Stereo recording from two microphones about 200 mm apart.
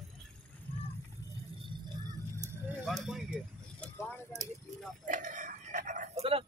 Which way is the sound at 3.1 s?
Centre (ahead or behind).